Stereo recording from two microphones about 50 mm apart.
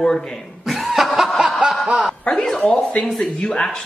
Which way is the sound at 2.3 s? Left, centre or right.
Centre.